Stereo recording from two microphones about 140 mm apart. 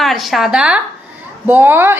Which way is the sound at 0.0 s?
Centre (ahead or behind).